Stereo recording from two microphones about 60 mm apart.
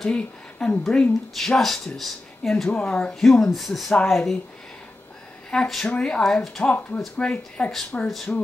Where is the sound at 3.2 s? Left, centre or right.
Centre.